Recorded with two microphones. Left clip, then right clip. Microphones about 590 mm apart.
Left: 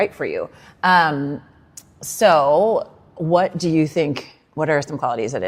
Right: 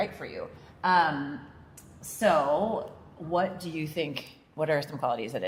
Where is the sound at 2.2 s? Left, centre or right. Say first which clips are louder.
Left 11 dB; left.